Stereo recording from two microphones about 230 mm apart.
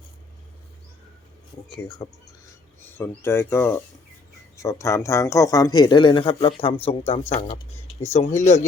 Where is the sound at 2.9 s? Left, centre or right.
Centre; by 8.6 s left.